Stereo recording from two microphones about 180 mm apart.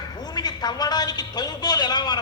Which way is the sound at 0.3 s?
25° left (ahead or behind).